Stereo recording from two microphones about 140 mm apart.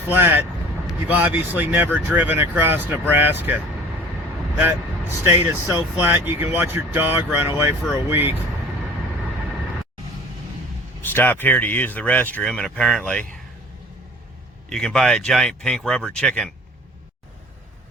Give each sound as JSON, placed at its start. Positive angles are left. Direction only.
{"t": 0.1, "sound": "speech", "side_deg": -15}
{"t": 5.5, "sound": "speech", "side_deg": -15}
{"t": 11.0, "sound": "speech", "side_deg": 15}
{"t": 14.7, "sound": "speech", "side_deg": 5}